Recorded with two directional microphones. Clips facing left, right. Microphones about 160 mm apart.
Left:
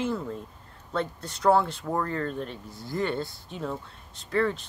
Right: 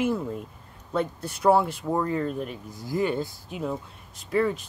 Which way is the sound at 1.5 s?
10° right (ahead or behind).